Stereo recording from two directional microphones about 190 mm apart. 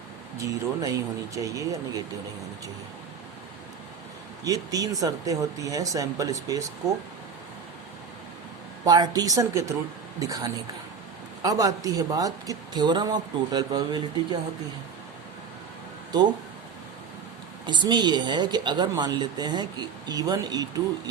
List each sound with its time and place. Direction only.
0.3 s speech: 20° right (ahead or behind)
4.4 s speech: 20° right (ahead or behind)
8.8 s speech: 20° right (ahead or behind)
17.7 s speech: 25° right (ahead or behind)